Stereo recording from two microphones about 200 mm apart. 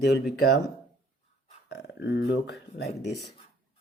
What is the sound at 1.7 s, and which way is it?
Speech, 60° left (ahead or behind).